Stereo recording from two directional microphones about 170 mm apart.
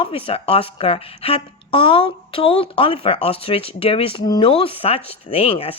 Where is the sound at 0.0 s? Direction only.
35° left (ahead or behind).